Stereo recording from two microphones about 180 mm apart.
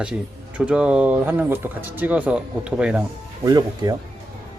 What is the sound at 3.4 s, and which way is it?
Speech, 20° right (ahead or behind).